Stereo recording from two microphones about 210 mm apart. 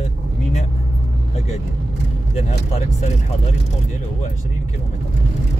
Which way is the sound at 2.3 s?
30° left (ahead or behind).